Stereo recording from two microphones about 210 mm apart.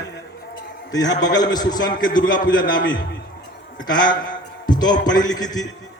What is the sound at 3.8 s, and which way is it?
A man's voice, 20° left (ahead or behind).